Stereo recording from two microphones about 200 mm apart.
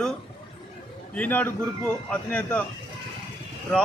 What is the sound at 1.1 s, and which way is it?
A man's voice, 10° left (ahead or behind).